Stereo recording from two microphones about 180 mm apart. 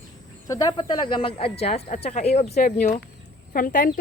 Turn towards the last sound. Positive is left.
turn(degrees=50)  # may be behind; listen again after turning